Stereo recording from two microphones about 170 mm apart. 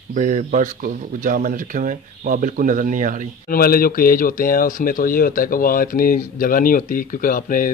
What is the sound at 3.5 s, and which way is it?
Speech, 60° left (ahead or behind).